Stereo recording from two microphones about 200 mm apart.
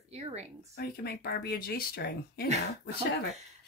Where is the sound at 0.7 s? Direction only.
50° left (ahead or behind).